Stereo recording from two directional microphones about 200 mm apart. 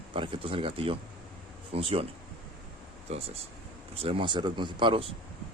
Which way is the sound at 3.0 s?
30° right (ahead or behind).